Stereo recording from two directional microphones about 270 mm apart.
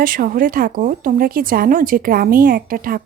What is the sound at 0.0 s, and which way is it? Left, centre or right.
A woman's voice, right.